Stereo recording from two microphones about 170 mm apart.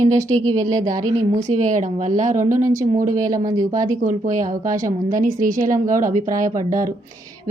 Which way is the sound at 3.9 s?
50° right (ahead or behind).